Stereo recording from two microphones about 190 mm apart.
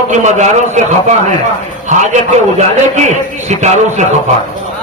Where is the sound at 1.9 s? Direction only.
40° right (ahead or behind).